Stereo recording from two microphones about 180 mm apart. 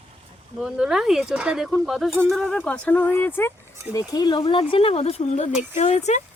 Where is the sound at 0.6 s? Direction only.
5° right (ahead or behind).